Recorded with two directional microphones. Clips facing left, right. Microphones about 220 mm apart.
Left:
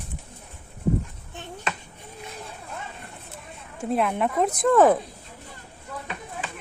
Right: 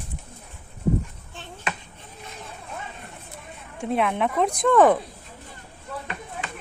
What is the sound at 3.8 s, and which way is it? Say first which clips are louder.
Speech: even; centre (ahead or behind).